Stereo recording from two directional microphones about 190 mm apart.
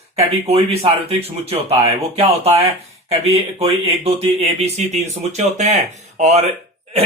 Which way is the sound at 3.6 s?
30° right (ahead or behind).